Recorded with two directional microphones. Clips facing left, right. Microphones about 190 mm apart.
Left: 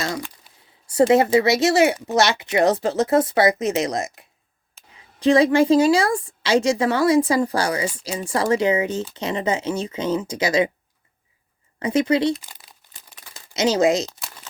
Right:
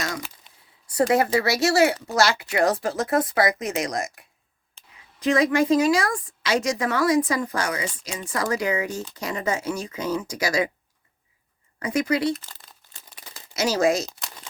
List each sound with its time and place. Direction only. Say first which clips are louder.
0.9 s speech: left 5 dB; 25° left (ahead or behind)
11.8 s speech: left 4 dB; 25° left (ahead or behind)
12.4 s crumpling: left 1 dB; 15° left (ahead or behind)